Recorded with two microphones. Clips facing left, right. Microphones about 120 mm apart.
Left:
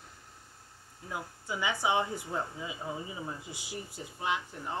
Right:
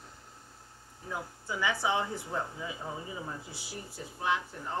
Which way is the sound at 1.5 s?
20° left (ahead or behind).